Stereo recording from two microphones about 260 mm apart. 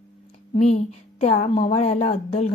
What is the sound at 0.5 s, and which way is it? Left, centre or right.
Speech, left.